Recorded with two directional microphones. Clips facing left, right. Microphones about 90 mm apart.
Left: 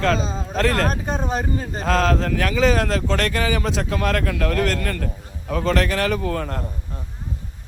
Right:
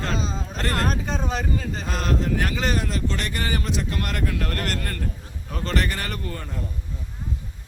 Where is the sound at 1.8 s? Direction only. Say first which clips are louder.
Left 10 dB; 90° left.